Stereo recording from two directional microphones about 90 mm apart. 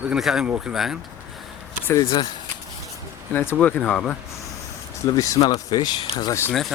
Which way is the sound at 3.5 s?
15° left (ahead or behind).